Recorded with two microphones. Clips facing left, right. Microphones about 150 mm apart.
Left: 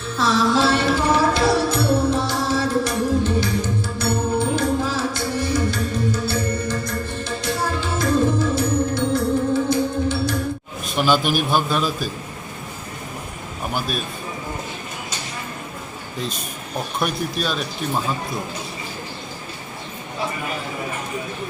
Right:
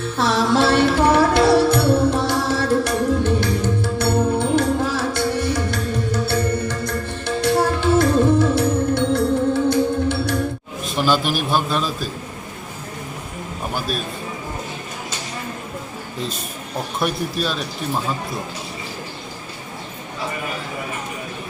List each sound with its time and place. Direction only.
0.2 s music: 60° right (ahead or behind)
10.8 s a man's voice: centre (ahead or behind)
17.0 s speech: centre (ahead or behind)